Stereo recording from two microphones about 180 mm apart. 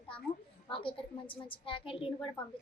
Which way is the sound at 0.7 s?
30° left (ahead or behind).